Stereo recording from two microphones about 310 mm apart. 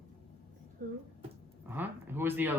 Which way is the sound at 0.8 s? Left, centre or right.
Right.